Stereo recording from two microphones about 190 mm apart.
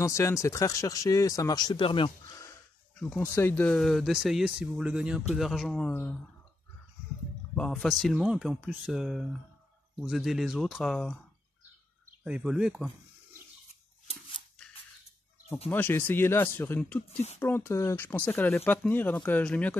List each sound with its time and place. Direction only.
0.0 s speech: 15° left (ahead or behind)
3.0 s speech: 5° left (ahead or behind)
7.5 s speech: 5° left (ahead or behind)
12.2 s speech: 5° right (ahead or behind)
15.7 s speech: 10° left (ahead or behind)